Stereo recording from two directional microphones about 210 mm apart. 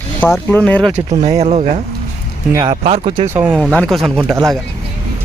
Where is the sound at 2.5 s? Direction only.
15° right (ahead or behind).